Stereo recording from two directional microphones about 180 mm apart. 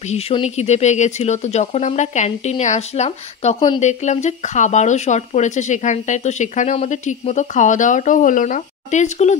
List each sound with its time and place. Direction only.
0.1 s speech: 35° left (ahead or behind)
3.8 s speech: 40° left (ahead or behind)